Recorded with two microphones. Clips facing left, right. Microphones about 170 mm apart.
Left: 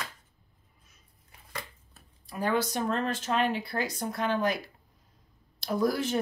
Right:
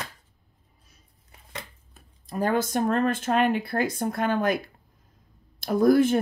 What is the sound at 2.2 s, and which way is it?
Speech, 45° right (ahead or behind).